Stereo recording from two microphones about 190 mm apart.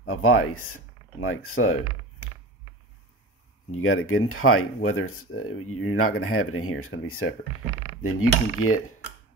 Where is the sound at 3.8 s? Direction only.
90° left.